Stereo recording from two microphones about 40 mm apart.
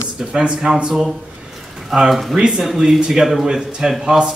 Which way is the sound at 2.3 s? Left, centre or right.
Centre.